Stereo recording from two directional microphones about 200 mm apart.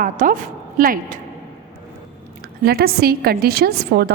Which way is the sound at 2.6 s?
50° right (ahead or behind).